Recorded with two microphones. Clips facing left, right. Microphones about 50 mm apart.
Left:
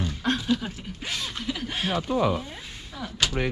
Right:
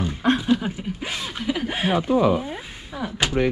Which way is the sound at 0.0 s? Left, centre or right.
Centre.